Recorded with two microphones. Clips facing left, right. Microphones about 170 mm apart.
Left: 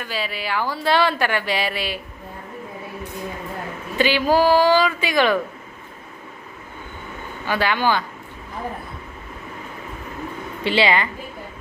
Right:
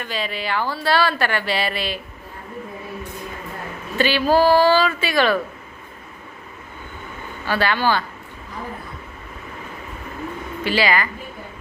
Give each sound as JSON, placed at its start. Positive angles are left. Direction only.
{"t": 0.0, "sound": "speech", "side_deg": 5}
{"t": 3.9, "sound": "speech", "side_deg": 15}
{"t": 7.4, "sound": "speech", "side_deg": 15}
{"t": 10.6, "sound": "a woman's voice", "side_deg": 25}